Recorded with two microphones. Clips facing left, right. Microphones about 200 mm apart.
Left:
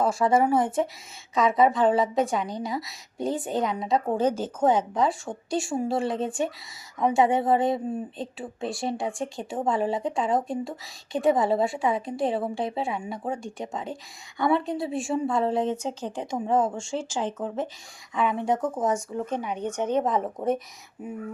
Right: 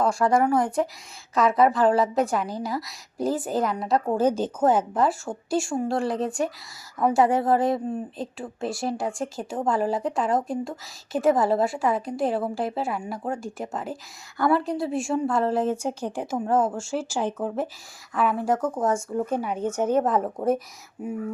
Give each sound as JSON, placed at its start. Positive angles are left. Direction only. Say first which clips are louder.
{"t": 0.0, "sound": "a woman's voice", "louder": "right 1 dB", "side_deg": 0}
{"t": 4.3, "sound": "speech", "louder": "right 3 dB", "side_deg": -15}
{"t": 4.6, "sound": "a woman's voice", "louder": "right 1 dB", "side_deg": -5}